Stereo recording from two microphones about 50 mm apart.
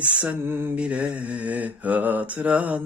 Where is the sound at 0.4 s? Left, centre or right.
Right.